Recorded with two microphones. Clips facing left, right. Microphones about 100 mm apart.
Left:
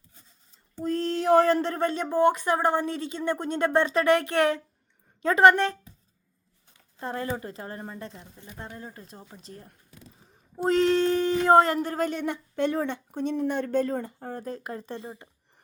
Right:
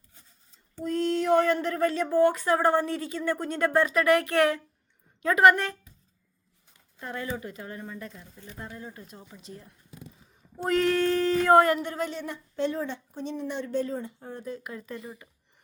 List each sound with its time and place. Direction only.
0.8 s speech: 35° left (ahead or behind)
7.0 s a woman's voice: 35° left (ahead or behind)
10.2 s roaring cats: 30° left (ahead or behind)
10.7 s a sound: 25° left (ahead or behind)
11.8 s speech: 40° left (ahead or behind)
12.2 s speech: 65° left (ahead or behind); by 15.3 s 30° left (ahead or behind)